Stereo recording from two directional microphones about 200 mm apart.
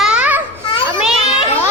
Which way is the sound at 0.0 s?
5° right (ahead or behind).